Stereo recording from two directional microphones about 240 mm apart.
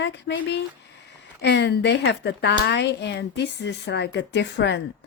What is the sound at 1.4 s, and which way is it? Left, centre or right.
A woman's voice, left.